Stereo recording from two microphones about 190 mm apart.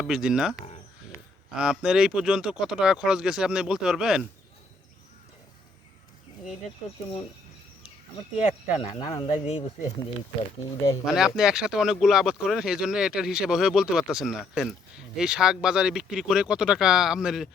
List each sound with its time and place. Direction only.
0.0 s speech: 5° right (ahead or behind)
1.5 s speech: 5° right (ahead or behind)
8.4 s speech: 35° left (ahead or behind)
11.0 s speech: centre (ahead or behind)